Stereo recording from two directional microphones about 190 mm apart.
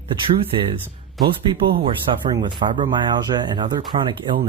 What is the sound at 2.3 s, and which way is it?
Speech, 25° right (ahead or behind).